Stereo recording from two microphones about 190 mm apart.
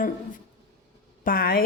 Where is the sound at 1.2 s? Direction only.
50° left (ahead or behind).